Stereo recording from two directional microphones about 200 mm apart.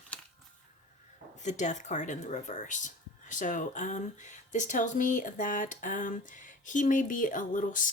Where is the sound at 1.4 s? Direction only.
35° left (ahead or behind).